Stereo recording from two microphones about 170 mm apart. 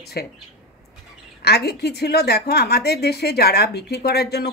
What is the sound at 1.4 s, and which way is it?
A woman's voice, 75° left (ahead or behind).